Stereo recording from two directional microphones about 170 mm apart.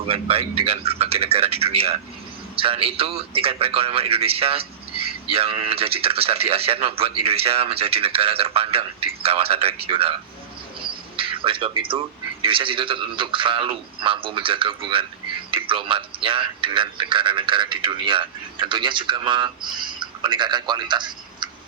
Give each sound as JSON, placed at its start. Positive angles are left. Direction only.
{"t": 0.1, "sound": "speech", "side_deg": -35}
{"t": 11.2, "sound": "a man's voice", "side_deg": -30}